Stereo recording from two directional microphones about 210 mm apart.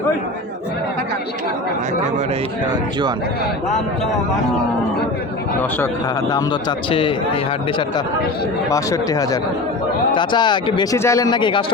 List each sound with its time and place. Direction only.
5.8 s speech: 20° left (ahead or behind)
8.7 s speech: 15° left (ahead or behind)